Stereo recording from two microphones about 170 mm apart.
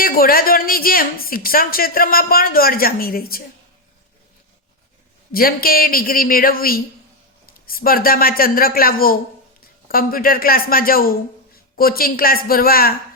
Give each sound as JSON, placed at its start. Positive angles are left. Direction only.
{"t": 0.0, "sound": "speech", "side_deg": 60}
{"t": 5.3, "sound": "a man's voice", "side_deg": 60}